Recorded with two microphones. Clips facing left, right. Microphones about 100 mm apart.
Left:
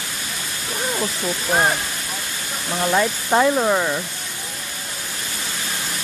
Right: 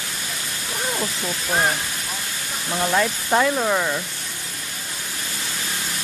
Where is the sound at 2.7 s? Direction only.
5° left (ahead or behind).